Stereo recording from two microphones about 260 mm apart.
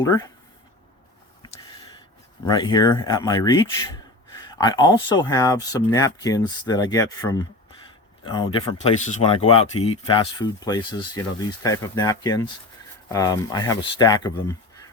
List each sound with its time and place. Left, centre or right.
0.0 s speech: centre
2.5 s speech: centre